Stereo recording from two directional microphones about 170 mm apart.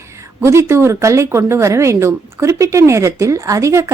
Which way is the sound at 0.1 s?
15° right (ahead or behind).